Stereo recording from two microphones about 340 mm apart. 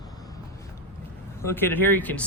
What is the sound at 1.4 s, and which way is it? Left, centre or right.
Speech, centre.